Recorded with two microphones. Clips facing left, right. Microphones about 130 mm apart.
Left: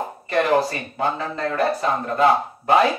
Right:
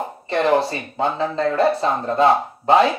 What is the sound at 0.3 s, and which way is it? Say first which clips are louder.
A man's voice: right 1 dB; 25° right (ahead or behind).